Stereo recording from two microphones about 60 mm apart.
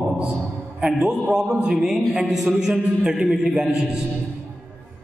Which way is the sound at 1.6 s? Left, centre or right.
Centre.